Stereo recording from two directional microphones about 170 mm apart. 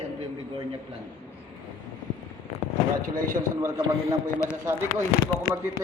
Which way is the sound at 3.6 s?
20° right (ahead or behind).